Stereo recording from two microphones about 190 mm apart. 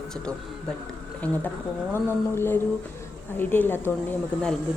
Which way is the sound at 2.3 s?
10° left (ahead or behind).